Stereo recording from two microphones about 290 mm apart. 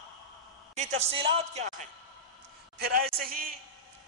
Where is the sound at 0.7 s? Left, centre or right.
Right.